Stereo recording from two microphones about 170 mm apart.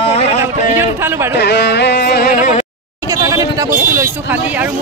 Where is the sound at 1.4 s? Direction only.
85° left.